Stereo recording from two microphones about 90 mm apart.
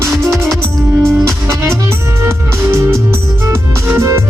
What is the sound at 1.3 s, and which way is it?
Music, 30° right (ahead or behind).